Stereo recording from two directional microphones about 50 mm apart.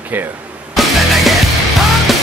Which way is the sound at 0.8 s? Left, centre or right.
Centre.